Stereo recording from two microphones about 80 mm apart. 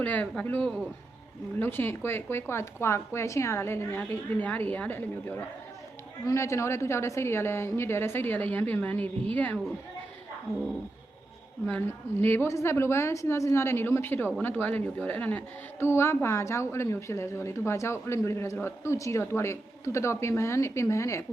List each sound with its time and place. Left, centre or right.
0.0 s speech: centre
1.5 s a woman's voice: left
12.2 s a woman's voice: left